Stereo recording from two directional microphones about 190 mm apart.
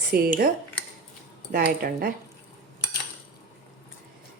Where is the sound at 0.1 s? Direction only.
50° right (ahead or behind).